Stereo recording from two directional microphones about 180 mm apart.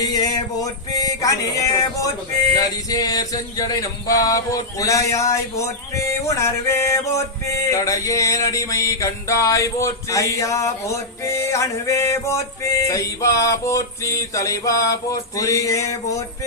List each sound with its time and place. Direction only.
0.0 s music: 20° left (ahead or behind)